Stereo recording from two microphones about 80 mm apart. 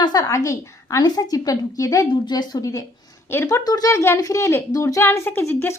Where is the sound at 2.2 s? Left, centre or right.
Left.